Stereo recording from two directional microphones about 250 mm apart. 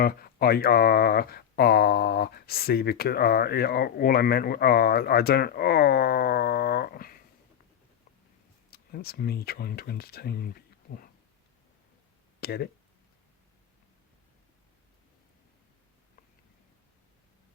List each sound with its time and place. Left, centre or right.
0.0 s speech: left
8.7 s speech: left
12.4 s speech: left